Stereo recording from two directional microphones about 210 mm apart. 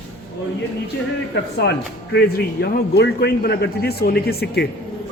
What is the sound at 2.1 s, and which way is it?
A man's voice, 50° left (ahead or behind).